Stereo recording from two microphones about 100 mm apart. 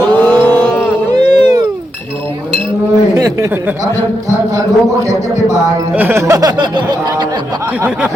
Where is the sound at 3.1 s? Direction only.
35° right (ahead or behind).